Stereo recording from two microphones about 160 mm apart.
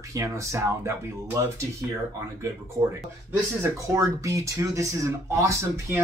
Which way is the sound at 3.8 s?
20° right (ahead or behind).